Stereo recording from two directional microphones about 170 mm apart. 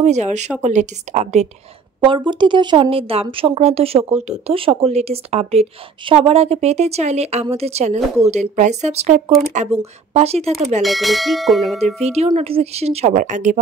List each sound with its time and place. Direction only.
0.0 s speech: 40° right (ahead or behind)
2.0 s speech: 30° right (ahead or behind)
10.8 s bell: centre (ahead or behind)
11.8 s speech: 40° right (ahead or behind)